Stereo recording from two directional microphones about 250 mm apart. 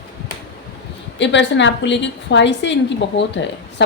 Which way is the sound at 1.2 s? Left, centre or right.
Left.